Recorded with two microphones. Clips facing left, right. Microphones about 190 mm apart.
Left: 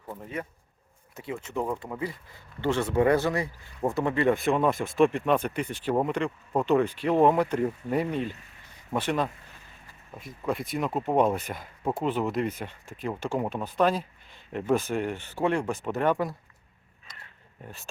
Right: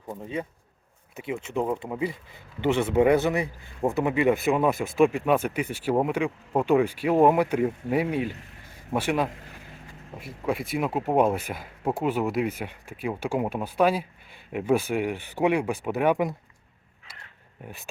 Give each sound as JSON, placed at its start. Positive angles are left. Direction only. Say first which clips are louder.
{"t": 0.1, "sound": "speech", "louder": "right 3 dB", "side_deg": -15}
{"t": 1.5, "sound": "speech", "louder": "right 3 dB", "side_deg": -10}
{"t": 4.0, "sound": "speech", "louder": "right 1 dB", "side_deg": -10}